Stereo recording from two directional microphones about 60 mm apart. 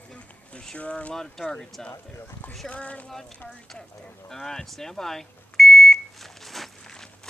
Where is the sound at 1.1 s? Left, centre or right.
Centre.